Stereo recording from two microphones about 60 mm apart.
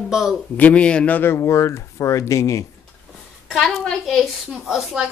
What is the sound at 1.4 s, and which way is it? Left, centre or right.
Speech, left.